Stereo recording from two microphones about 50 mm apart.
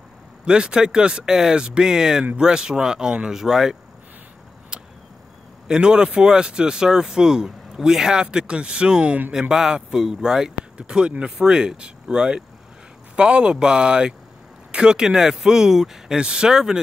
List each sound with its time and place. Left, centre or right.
0.5 s speech: centre
4.7 s a sound: right
5.7 s speech: centre